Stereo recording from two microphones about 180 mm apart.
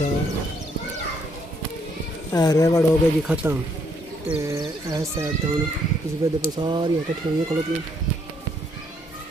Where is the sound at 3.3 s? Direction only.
5° right (ahead or behind).